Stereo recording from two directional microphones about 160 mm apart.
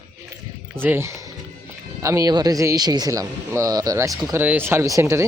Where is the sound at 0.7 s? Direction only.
15° right (ahead or behind).